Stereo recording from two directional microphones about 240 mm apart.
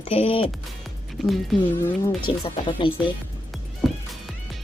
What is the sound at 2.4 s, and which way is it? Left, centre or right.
Speech, left.